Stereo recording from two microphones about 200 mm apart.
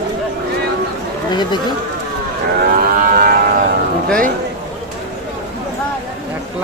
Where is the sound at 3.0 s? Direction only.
45° right (ahead or behind).